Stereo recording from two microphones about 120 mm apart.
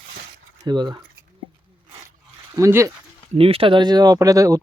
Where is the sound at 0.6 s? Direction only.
35° right (ahead or behind).